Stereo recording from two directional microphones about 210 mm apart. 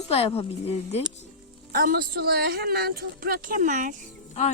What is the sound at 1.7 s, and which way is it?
Speech, 45° right (ahead or behind).